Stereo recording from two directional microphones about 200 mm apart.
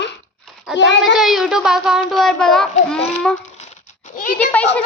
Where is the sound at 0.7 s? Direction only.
60° left (ahead or behind).